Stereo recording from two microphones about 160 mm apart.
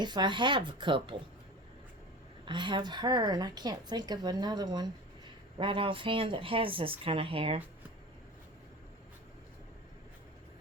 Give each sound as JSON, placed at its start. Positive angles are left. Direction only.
{"t": 0.0, "sound": "speech", "side_deg": -30}
{"t": 2.4, "sound": "a woman's voice", "side_deg": -30}